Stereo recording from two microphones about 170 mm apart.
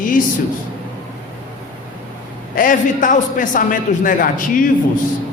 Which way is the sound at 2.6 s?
50° left (ahead or behind).